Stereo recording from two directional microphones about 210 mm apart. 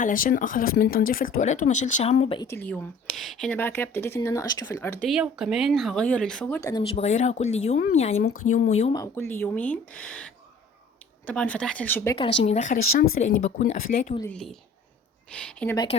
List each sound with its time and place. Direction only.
0.0 s speech: 40° left (ahead or behind)
2.3 s speech: 15° left (ahead or behind)
5.0 s speech: 5° right (ahead or behind)
6.6 s speech: 15° left (ahead or behind)
6.8 s speech: 30° left (ahead or behind)
8.1 s speech: 90° left
8.4 s speech: 35° left (ahead or behind)
8.9 s speech: 15° left (ahead or behind)
11.3 s speech: 5° left (ahead or behind)
12.1 s speech: 25° left (ahead or behind)
14.2 s speech: 5° left (ahead or behind)